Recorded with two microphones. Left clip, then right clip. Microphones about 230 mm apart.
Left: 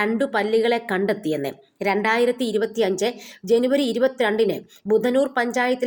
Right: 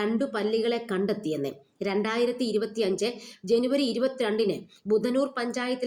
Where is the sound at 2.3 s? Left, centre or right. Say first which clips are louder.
Left 6 dB; centre.